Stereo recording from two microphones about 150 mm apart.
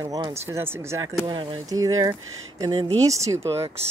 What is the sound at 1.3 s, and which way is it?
Speech, 35° right (ahead or behind).